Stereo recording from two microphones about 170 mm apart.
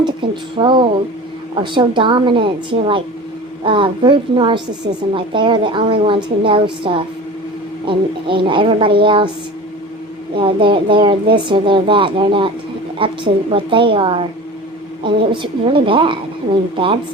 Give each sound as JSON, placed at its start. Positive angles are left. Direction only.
{"t": 0.2, "sound": "a woman's voice", "side_deg": -30}
{"t": 10.3, "sound": "a woman's voice", "side_deg": -30}